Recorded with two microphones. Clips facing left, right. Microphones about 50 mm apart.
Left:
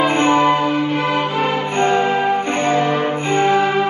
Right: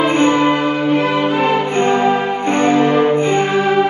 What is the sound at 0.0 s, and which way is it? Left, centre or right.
Music, left.